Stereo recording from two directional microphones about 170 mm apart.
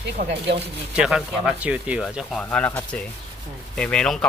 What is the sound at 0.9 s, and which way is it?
Speech, 5° right (ahead or behind).